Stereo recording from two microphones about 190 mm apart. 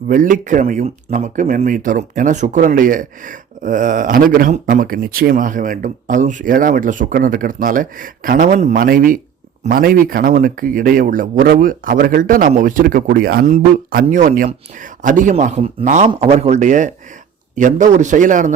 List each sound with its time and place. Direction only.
0.1 s speech: 45° right (ahead or behind)